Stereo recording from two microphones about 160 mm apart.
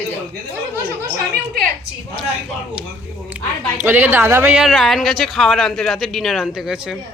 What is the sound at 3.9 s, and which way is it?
Speech, 15° right (ahead or behind).